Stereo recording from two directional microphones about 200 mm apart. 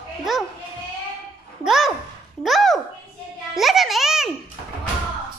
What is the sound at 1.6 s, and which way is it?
A child's voice, centre (ahead or behind).